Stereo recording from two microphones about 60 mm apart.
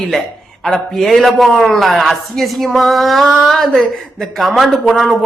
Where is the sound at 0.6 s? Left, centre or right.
Centre.